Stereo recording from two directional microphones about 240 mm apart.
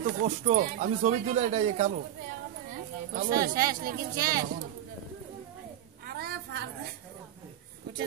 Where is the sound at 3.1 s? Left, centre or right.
Right.